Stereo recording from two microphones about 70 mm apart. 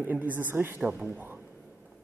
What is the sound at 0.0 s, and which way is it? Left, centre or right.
A man's voice, right.